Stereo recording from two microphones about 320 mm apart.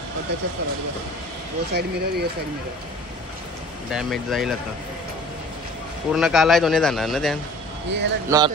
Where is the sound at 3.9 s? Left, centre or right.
Centre.